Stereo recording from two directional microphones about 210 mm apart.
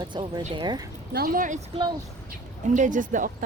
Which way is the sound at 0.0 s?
20° right (ahead or behind).